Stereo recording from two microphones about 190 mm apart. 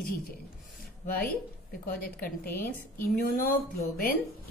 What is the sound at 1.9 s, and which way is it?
Speech, 50° left (ahead or behind).